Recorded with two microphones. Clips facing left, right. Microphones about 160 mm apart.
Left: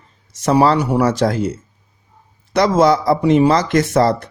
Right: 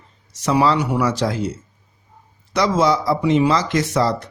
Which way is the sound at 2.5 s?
55° left (ahead or behind).